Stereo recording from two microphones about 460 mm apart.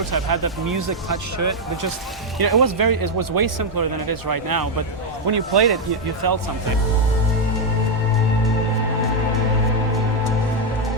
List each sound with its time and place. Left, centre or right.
0.1 s speech: right
2.4 s speech: right